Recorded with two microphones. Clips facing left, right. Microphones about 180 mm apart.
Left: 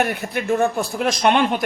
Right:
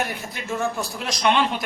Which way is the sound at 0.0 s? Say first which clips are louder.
Left 7 dB; 60° left (ahead or behind).